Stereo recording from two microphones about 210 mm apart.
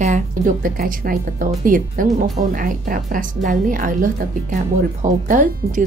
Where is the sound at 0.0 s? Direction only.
35° right (ahead or behind).